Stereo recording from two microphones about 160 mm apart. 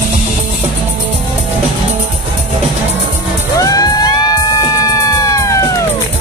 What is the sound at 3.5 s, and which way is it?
Music, 20° left (ahead or behind).